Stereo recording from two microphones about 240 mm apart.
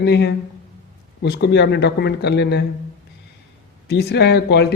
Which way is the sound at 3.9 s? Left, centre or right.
Left.